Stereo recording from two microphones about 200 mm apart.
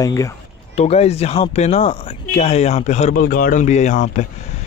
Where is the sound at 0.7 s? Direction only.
30° left (ahead or behind).